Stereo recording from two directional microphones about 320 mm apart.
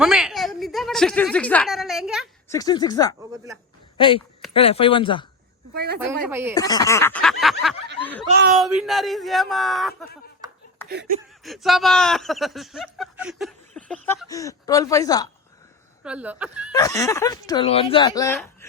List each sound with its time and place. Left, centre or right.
0.0 s speech: centre
2.5 s speech: centre
3.2 s speech: centre
3.9 s speech: centre
5.7 s speech: right
6.2 s speech: centre
6.5 s speech: centre
10.8 s a sound: right
11.4 s speech: centre
16.0 s speech: centre
16.7 s speech: centre